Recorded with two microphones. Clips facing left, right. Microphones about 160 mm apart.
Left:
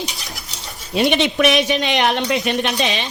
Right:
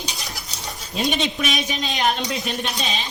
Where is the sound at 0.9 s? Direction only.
70° left (ahead or behind).